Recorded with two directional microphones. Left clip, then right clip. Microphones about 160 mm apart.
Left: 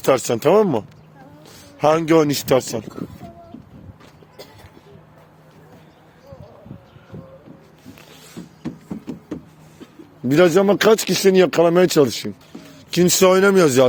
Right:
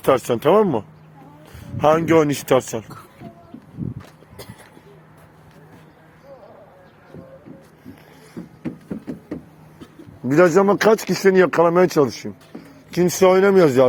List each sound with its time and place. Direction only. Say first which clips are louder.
0.0 s speech: even; 20° left (ahead or behind)
10.5 s speech: left 1 dB; 35° left (ahead or behind); by 13.8 s 50° left (ahead or behind)